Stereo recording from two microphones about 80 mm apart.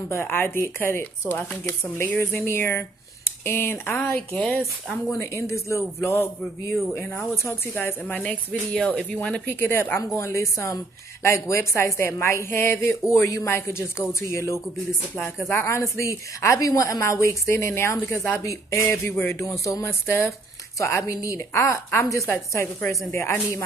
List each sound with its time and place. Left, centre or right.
0.1 s a woman's voice: left
4.1 s speech: centre
5.2 s a woman's voice: left
8.2 s speech: centre
9.5 s a woman's voice: left
19.0 s a woman's voice: left